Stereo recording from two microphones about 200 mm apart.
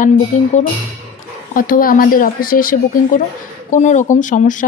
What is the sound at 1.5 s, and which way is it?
A woman's voice, 45° left (ahead or behind).